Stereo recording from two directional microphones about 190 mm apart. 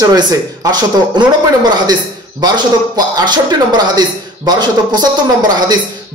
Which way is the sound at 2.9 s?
20° right (ahead or behind).